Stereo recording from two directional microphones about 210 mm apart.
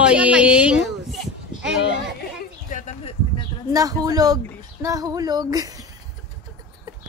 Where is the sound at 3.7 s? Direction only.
15° right (ahead or behind).